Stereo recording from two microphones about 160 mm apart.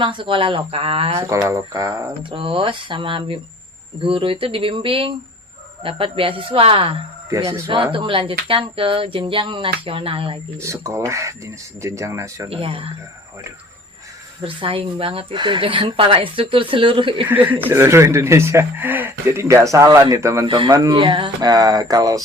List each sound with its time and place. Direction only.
0.0 s speech: 30° right (ahead or behind)
1.2 s music: 20° right (ahead or behind)
2.3 s speech: 35° right (ahead or behind)
10.6 s music: 15° right (ahead or behind)
12.5 s speech: 35° right (ahead or behind)
14.4 s speech: 35° right (ahead or behind)
17.2 s speech: 10° right (ahead or behind)
20.5 s music: 30° right (ahead or behind)